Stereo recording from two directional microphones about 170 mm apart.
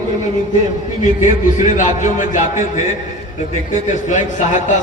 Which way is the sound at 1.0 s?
45° left (ahead or behind).